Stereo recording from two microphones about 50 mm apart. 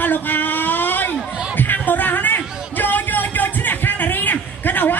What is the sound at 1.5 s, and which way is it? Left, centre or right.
Music, left.